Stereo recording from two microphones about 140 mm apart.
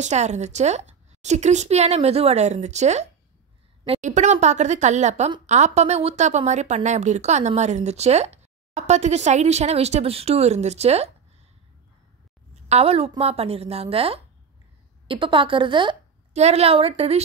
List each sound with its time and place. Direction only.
0.0 s speech: 55° right (ahead or behind)
12.6 s a woman's voice: 45° right (ahead or behind)
16.3 s speech: 50° right (ahead or behind)